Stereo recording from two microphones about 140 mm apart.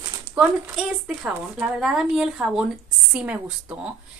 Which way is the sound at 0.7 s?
Centre (ahead or behind).